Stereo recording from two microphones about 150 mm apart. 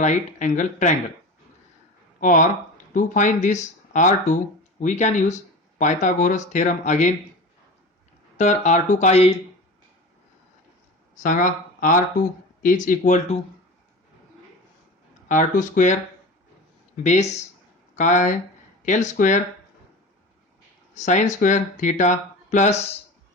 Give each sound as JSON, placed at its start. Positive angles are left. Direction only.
{"t": 0.0, "sound": "speech", "side_deg": 55}
{"t": 2.2, "sound": "speech", "side_deg": 60}
{"t": 8.4, "sound": "speech", "side_deg": 50}
{"t": 11.2, "sound": "speech", "side_deg": 60}
{"t": 15.3, "sound": "speech", "side_deg": 60}
{"t": 17.0, "sound": "speech", "side_deg": 50}
{"t": 20.9, "sound": "speech", "side_deg": 55}